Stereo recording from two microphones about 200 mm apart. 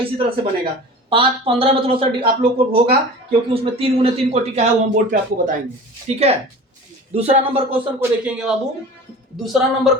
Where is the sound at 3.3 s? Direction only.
30° right (ahead or behind).